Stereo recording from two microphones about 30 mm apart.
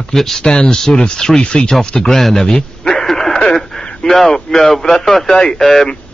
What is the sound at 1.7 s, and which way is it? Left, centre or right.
Speech, left.